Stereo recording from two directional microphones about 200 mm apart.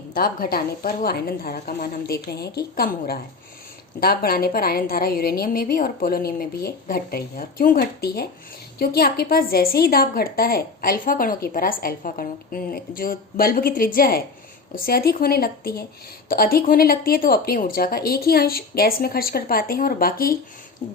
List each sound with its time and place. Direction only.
0.1 s a woman's voice: 50° left (ahead or behind)